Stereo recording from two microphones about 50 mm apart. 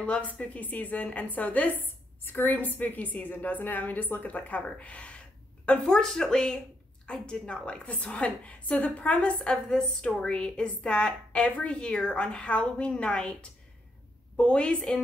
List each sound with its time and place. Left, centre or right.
0.0 s a woman's voice: left
5.9 s a woman's voice: centre